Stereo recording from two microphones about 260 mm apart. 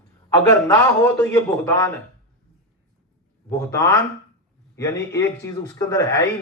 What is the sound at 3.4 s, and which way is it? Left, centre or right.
A man's voice, centre.